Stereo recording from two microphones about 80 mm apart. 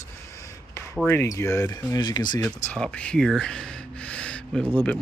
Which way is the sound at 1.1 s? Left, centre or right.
Left.